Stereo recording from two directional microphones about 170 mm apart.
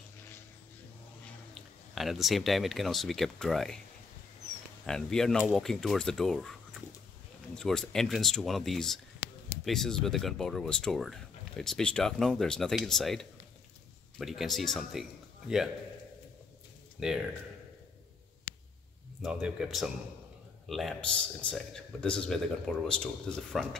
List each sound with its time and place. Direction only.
1.5 s speech: centre (ahead or behind)
4.8 s speech: 5° left (ahead or behind)
7.5 s a man's voice: 5° left (ahead or behind)
17.0 s speech: 5° right (ahead or behind)
19.2 s speech: 5° right (ahead or behind)